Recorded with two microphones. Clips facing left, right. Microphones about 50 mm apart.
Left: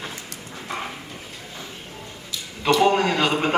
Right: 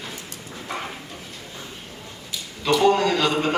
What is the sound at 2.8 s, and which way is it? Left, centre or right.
Speech, left.